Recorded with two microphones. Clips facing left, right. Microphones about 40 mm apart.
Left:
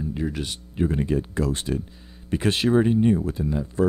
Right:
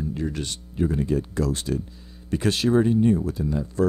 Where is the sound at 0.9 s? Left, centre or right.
Left.